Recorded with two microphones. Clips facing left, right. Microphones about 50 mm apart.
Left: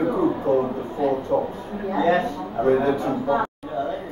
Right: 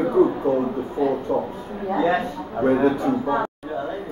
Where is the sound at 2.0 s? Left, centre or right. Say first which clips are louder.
Left 2 dB; centre.